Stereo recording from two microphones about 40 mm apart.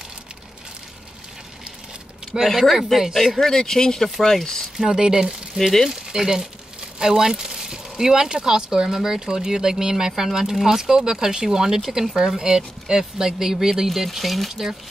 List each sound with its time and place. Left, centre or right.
2.3 s a man's voice: centre
3.2 s speech: centre
4.7 s speech: centre
14.5 s speech: centre